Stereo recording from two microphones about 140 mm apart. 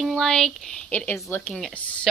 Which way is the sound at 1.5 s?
Centre (ahead or behind).